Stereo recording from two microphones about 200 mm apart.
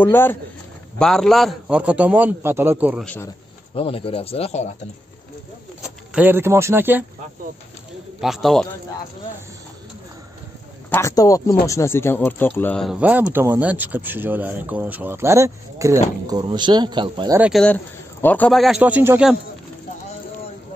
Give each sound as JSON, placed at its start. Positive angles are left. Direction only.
{"t": 0.0, "sound": "a man's voice", "side_deg": 10}
{"t": 3.7, "sound": "speech", "side_deg": 30}
{"t": 5.8, "sound": "speech", "side_deg": -10}
{"t": 8.2, "sound": "a man's voice", "side_deg": 0}
{"t": 10.9, "sound": "a man's voice", "side_deg": 15}
{"t": 17.4, "sound": "a man's voice", "side_deg": 0}